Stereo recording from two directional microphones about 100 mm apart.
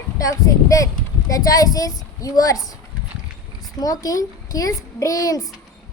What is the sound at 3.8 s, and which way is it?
A woman's voice, 35° left (ahead or behind).